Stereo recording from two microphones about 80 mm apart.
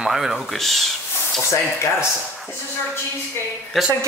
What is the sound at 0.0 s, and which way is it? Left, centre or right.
Speech, centre.